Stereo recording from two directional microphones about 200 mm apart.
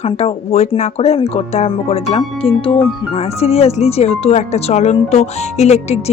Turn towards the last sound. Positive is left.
turn(degrees=30)  # may be behind; listen again after turning